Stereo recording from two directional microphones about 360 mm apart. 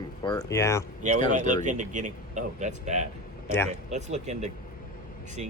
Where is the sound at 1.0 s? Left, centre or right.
Centre.